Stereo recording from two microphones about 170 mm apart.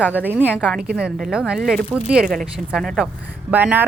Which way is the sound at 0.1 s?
10° right (ahead or behind).